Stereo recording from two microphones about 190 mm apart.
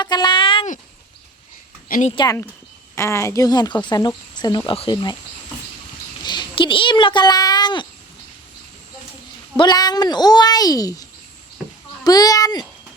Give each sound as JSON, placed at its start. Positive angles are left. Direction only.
{"t": 0.0, "sound": "a sound", "side_deg": 20}
{"t": 1.9, "sound": "speech", "side_deg": 40}
{"t": 2.1, "sound": "speech", "side_deg": 20}
{"t": 6.2, "sound": "a sound", "side_deg": 25}
{"t": 9.6, "sound": "speech", "side_deg": 20}
{"t": 12.0, "sound": "speech", "side_deg": 20}